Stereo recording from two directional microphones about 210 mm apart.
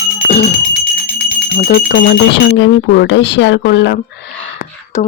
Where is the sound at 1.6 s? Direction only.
45° left (ahead or behind).